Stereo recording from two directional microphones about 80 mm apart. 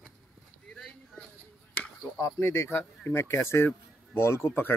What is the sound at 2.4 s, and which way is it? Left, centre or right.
Speech, left.